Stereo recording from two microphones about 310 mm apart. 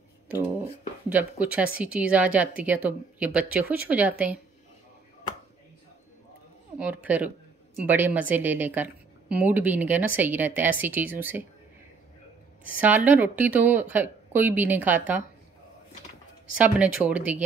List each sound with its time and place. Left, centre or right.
1.0 s speech: centre
6.8 s speech: centre
12.6 s speech: centre
16.5 s speech: centre